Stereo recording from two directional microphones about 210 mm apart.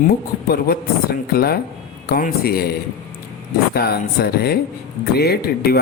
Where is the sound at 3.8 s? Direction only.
50° left (ahead or behind).